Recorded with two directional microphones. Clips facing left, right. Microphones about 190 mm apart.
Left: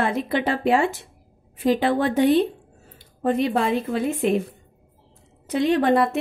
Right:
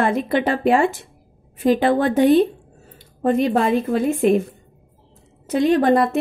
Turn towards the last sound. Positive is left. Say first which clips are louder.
# right 3 dB
turn(degrees=-45)  # may be behind; listen again after turning